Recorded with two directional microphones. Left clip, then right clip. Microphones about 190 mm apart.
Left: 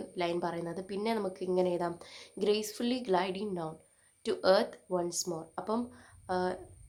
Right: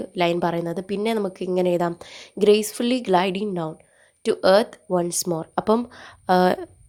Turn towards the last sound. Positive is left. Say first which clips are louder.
# right 15 dB
turn(degrees=-45)  # may be behind; listen again after turning